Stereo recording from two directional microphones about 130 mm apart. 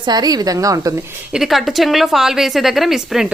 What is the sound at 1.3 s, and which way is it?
A woman's voice, centre (ahead or behind).